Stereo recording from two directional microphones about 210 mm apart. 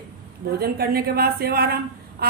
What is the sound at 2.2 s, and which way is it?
Quack, 50° right (ahead or behind).